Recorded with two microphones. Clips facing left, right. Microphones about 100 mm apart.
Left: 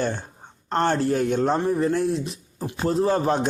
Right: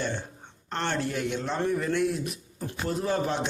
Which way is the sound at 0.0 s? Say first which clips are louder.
Left 5 dB; 40° left (ahead or behind).